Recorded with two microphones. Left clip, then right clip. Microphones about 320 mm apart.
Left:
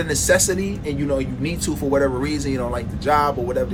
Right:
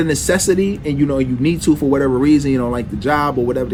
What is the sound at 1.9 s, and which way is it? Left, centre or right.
Speech, right.